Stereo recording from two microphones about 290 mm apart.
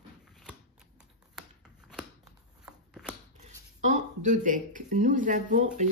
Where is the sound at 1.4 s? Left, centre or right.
Centre.